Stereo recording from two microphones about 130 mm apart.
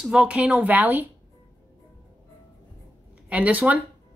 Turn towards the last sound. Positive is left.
turn(degrees=-10)  # may be behind; listen again after turning